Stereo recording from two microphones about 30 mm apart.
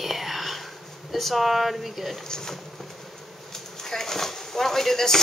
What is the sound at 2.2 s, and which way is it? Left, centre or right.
Speech, centre.